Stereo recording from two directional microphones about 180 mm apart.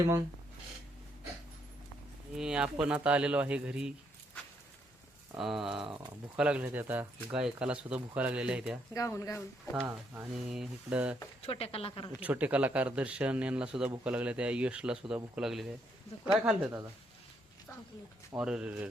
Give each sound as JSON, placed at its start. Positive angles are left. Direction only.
{"t": 2.3, "sound": "speech", "side_deg": -5}
{"t": 5.4, "sound": "speech", "side_deg": 0}
{"t": 5.8, "sound": "speech", "side_deg": -25}
{"t": 6.3, "sound": "speech", "side_deg": -5}
{"t": 8.9, "sound": "speech", "side_deg": 15}
{"t": 9.8, "sound": "speech", "side_deg": -5}
{"t": 11.4, "sound": "speech", "side_deg": 35}
{"t": 12.2, "sound": "speech", "side_deg": -10}
{"t": 18.3, "sound": "speech", "side_deg": -5}